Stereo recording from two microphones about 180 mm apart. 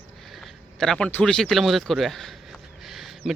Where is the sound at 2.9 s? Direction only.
Centre (ahead or behind).